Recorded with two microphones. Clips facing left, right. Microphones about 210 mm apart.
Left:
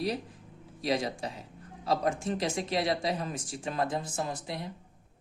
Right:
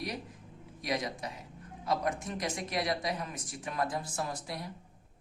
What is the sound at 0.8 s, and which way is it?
Speech, 30° left (ahead or behind).